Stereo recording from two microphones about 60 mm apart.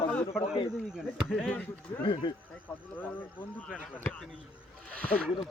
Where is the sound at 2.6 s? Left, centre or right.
Left.